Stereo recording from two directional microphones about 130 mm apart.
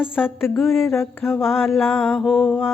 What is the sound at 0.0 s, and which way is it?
Mantra, 5° right (ahead or behind).